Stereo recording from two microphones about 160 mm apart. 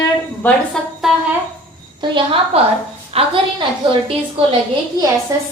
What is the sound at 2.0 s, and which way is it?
A woman's voice, 30° right (ahead or behind).